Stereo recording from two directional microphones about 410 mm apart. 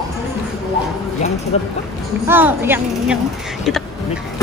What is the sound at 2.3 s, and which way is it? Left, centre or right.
Speech, centre.